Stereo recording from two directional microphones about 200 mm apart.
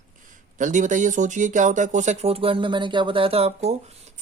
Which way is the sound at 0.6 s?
40° right (ahead or behind).